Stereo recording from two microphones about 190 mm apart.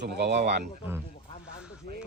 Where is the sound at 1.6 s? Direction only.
5° right (ahead or behind).